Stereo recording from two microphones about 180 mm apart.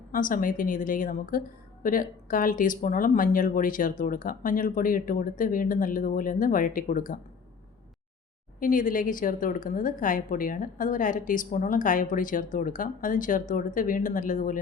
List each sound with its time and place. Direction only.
0.1 s speech: 50° left (ahead or behind)
8.5 s speech: 50° left (ahead or behind)